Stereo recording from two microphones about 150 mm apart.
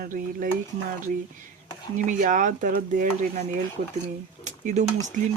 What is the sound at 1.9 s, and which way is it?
Speech, 60° right (ahead or behind).